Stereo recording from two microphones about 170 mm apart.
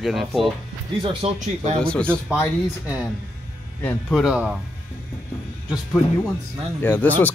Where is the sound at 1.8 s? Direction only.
5° left (ahead or behind).